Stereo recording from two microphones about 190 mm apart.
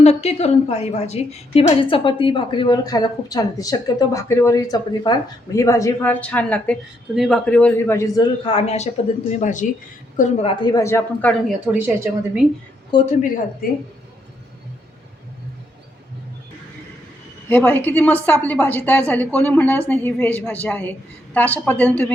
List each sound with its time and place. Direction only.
0.0 s a woman's voice: 35° left (ahead or behind)
10.5 s a woman's voice: 20° left (ahead or behind); by 11.5 s 5° left (ahead or behind)
11.6 s a woman's voice: 10° right (ahead or behind)
12.9 s a woman's voice: 25° left (ahead or behind)
13.6 s a woman's voice: 50° left (ahead or behind)
17.5 s a woman's voice: 10° left (ahead or behind)